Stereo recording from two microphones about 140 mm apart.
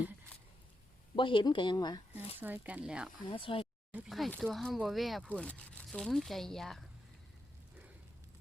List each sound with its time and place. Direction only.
1.1 s speech: 35° left (ahead or behind)
2.4 s speech: 10° right (ahead or behind)
3.2 s speech: 35° left (ahead or behind)
3.9 s speech: centre (ahead or behind)